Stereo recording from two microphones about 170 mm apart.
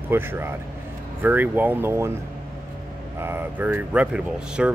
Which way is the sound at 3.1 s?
15° right (ahead or behind).